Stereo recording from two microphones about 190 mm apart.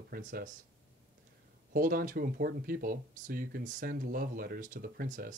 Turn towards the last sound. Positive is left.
turn(degrees=-45)  # may be behind; listen again after turning